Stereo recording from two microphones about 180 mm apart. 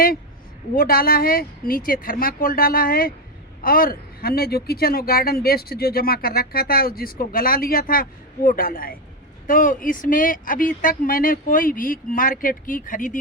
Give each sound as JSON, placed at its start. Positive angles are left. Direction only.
{"t": 0.8, "sound": "speech", "side_deg": 55}